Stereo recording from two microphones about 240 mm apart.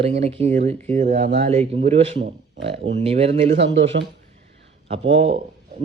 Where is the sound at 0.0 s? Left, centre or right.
Right.